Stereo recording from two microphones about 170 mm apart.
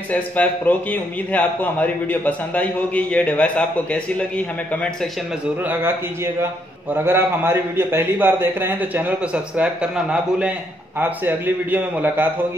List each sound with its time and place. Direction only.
0.1 s a man's voice: 10° left (ahead or behind)
7.1 s a man's voice: 15° right (ahead or behind)
11.0 s a man's voice: 10° right (ahead or behind)